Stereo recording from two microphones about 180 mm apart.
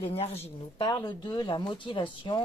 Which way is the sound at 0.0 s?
35° left (ahead or behind).